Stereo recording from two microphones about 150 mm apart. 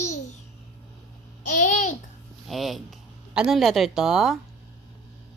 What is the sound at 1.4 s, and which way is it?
Babbling, 55° left (ahead or behind).